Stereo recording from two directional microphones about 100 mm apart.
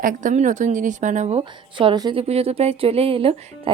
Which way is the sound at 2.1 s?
85° right.